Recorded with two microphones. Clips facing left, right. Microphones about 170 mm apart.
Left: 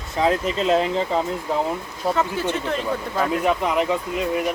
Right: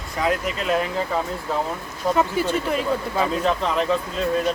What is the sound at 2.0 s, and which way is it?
Speech, 15° right (ahead or behind).